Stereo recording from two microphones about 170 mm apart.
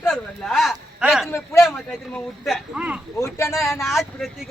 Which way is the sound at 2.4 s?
5° right (ahead or behind).